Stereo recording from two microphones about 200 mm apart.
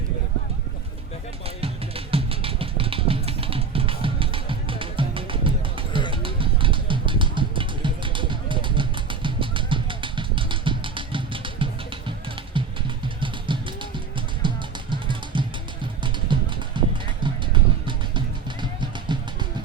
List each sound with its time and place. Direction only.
1.5 s music: 30° right (ahead or behind)
12.5 s a sound: 25° right (ahead or behind)
13.1 s music: 25° right (ahead or behind)